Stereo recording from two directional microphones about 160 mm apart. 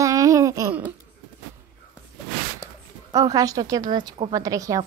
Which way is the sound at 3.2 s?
20° right (ahead or behind).